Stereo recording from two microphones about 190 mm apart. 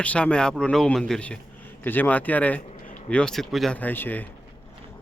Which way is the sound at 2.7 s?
40° left (ahead or behind).